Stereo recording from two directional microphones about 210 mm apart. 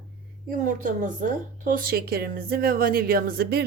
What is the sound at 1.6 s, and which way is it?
Speech, 45° right (ahead or behind).